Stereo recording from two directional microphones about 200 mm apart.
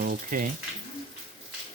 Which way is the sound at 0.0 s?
45° right (ahead or behind).